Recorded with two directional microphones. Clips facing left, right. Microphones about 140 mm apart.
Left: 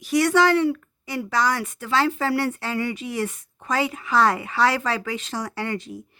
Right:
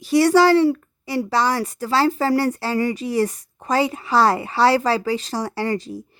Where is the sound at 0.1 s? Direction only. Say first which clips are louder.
Right 4 dB; 35° right (ahead or behind).